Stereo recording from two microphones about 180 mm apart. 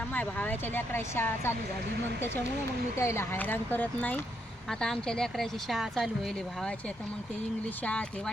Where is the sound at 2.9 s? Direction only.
15° left (ahead or behind).